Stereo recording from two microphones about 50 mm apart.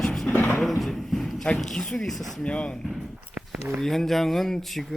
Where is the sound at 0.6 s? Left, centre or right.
Centre.